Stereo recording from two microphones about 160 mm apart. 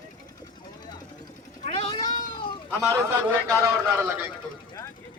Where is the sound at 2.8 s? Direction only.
15° right (ahead or behind).